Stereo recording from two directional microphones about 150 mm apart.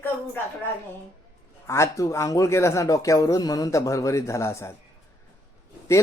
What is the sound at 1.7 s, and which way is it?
Speech, 20° left (ahead or behind).